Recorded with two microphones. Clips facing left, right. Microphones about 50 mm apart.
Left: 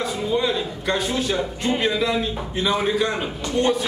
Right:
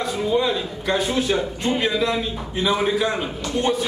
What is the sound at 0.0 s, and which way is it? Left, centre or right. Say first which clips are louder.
A man's voice: right 1 dB; centre.